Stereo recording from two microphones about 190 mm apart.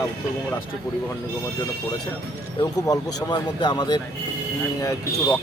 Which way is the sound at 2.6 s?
20° left (ahead or behind).